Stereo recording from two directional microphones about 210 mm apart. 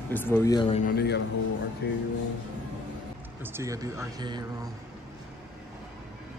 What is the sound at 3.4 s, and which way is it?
A man's voice, 15° right (ahead or behind).